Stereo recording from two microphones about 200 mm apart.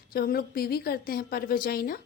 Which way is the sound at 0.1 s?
45° left (ahead or behind).